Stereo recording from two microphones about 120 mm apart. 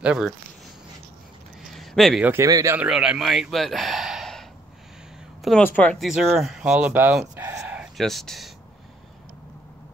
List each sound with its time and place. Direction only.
0.0 s speech: 5° right (ahead or behind)
1.6 s a sound: centre (ahead or behind)
2.2 s speech: 25° right (ahead or behind)
2.8 s speech: 5° right (ahead or behind)
5.6 s speech: 15° left (ahead or behind)
5.9 s speech: centre (ahead or behind)
7.3 s chicken: 20° right (ahead or behind)
8.0 s speech: centre (ahead or behind)